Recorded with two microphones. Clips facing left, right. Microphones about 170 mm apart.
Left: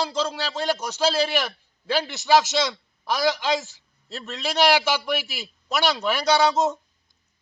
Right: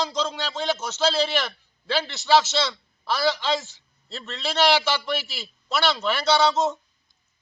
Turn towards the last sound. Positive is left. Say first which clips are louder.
# left 1 dB
turn(degrees=15)  # may be behind; listen again after turning